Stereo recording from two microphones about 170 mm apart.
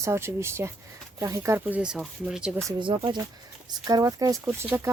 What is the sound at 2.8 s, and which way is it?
Speech, 30° right (ahead or behind).